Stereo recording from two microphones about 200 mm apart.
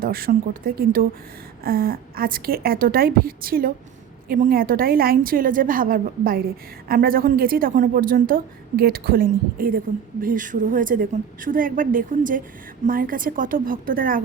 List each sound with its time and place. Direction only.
0.0 s a woman's voice: 45° right (ahead or behind)